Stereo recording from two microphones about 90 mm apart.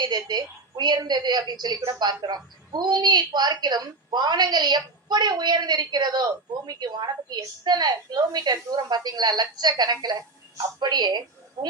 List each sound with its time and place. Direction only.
0.0 s a woman's voice: 50° right (ahead or behind)
11.6 s speech: 40° right (ahead or behind)